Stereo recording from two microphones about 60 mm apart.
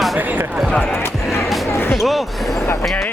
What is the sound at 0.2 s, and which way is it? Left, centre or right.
Speech, right.